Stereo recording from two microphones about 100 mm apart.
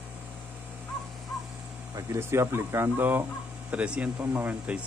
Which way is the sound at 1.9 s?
30° right (ahead or behind).